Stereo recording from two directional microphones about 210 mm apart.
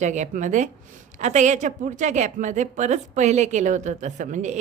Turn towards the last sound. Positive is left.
turn(degrees=-35)  # may be behind; listen again after turning